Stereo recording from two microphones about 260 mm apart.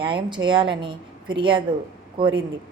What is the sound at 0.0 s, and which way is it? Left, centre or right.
A woman's voice, centre.